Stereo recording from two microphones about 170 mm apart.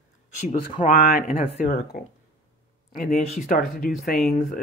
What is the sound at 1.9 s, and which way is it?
Speech, 60° left (ahead or behind).